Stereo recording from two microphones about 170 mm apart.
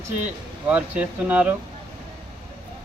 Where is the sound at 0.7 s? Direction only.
10° right (ahead or behind).